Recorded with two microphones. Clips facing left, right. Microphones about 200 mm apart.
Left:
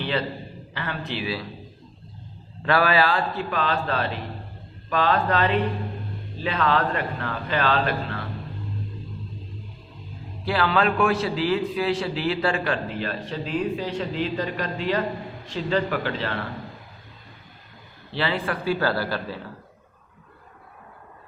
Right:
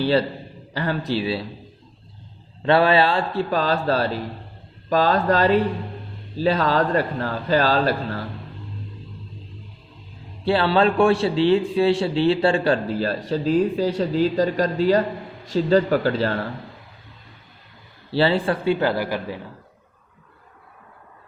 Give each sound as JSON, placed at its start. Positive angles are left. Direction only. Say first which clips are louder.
{"t": 0.0, "sound": "a man's voice", "louder": "right 7 dB", "side_deg": -35}
{"t": 2.6, "sound": "a man's voice", "louder": "right 4 dB", "side_deg": -25}
{"t": 10.4, "sound": "a man's voice", "louder": "right 4 dB", "side_deg": -30}
{"t": 18.1, "sound": "a man's voice", "louder": "right 7 dB", "side_deg": -30}